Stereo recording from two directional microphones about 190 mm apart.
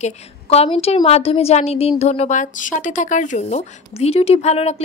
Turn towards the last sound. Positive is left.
turn(degrees=35)  # may be behind; listen again after turning